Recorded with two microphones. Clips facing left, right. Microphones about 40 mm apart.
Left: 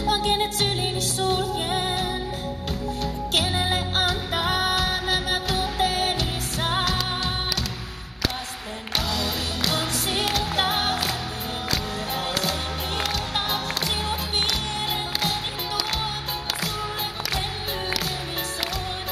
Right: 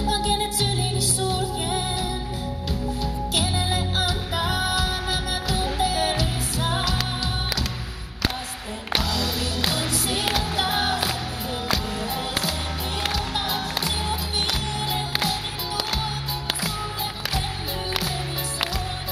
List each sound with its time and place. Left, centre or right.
0.0 s music: left
9.7 s music: left
13.1 s music: left